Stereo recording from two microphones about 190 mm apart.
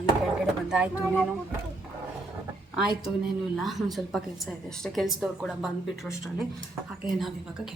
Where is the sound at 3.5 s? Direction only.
Centre (ahead or behind).